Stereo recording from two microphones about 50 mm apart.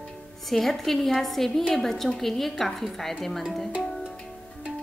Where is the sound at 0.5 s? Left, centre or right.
Centre.